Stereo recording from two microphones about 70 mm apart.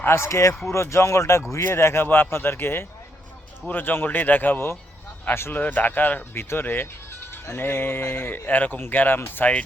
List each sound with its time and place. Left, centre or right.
0.0 s speech: left